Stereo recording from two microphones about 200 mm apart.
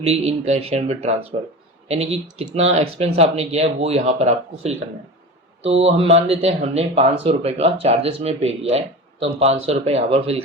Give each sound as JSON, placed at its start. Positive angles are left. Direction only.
{"t": 0.0, "sound": "speech", "side_deg": -30}